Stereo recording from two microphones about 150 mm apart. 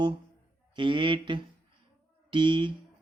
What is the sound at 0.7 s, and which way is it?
Speech, 30° right (ahead or behind).